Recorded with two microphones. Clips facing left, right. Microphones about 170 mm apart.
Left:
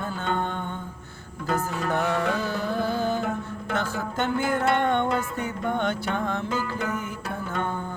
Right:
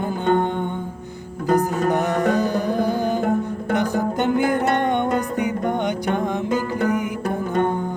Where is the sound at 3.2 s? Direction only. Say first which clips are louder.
Right 8 dB; 50° right (ahead or behind).